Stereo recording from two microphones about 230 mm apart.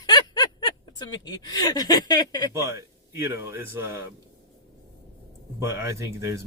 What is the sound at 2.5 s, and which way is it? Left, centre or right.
Speech, centre.